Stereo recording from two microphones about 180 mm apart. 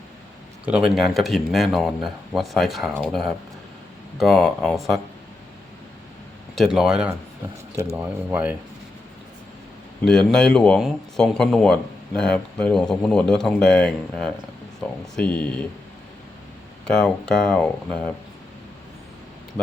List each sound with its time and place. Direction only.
0.6 s speech: 5° right (ahead or behind)
6.6 s speech: 5° right (ahead or behind)
10.0 s speech: 5° left (ahead or behind)
16.8 s speech: 5° left (ahead or behind)